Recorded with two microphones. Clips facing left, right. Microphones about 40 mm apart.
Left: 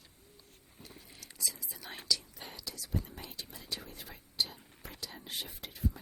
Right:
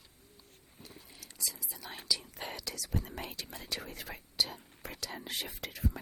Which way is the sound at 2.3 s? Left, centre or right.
Right.